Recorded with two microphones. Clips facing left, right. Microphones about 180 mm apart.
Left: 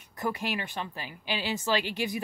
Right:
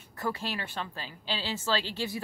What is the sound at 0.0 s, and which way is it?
A woman's voice, 15° left (ahead or behind).